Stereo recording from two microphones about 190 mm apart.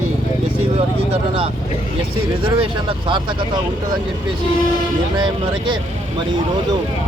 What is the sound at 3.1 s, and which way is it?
Speech, 25° right (ahead or behind).